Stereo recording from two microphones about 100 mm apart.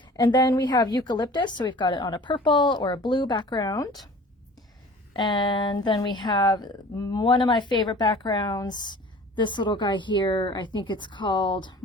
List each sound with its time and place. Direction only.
0.0 s speech: 45° left (ahead or behind)
5.1 s speech: 50° left (ahead or behind)